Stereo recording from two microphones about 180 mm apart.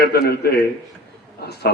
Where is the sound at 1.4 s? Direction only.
65° left (ahead or behind).